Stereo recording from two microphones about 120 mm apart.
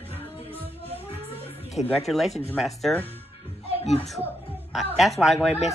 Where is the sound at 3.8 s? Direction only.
65° left (ahead or behind).